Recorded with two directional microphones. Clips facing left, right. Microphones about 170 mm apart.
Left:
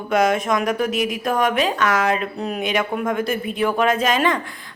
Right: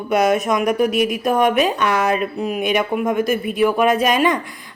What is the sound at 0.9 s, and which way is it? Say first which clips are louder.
Speech: right 4 dB; 20° left (ahead or behind).